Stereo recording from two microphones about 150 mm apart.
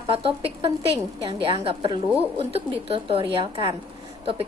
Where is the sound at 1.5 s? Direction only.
40° right (ahead or behind).